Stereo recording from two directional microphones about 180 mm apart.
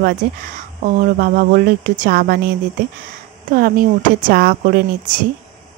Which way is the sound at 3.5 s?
50° right (ahead or behind).